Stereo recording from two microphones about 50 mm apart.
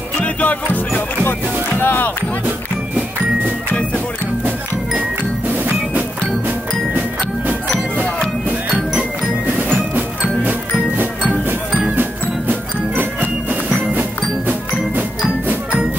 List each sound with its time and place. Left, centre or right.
0.2 s music: left
5.6 s music: right
11.0 s music: right